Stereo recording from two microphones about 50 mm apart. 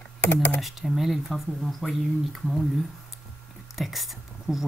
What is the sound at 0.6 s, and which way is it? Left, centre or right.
Speech, centre.